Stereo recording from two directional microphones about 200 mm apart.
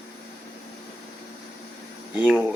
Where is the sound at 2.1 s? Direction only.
5° right (ahead or behind).